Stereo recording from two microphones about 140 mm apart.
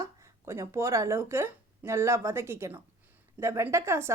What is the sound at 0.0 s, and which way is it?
A woman's voice, 20° right (ahead or behind).